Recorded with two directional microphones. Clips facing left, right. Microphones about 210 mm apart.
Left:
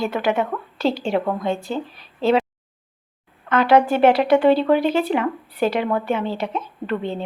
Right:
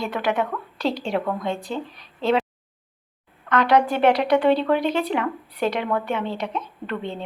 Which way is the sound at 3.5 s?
5° left (ahead or behind).